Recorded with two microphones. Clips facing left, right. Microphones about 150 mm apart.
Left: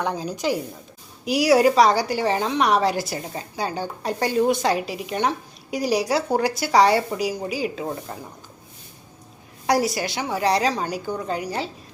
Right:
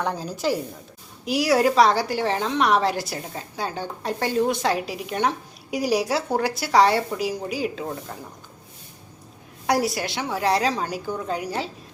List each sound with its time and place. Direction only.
0.0 s a woman's voice: 10° left (ahead or behind)
1.2 s a woman's voice: centre (ahead or behind)
9.6 s a woman's voice: centre (ahead or behind)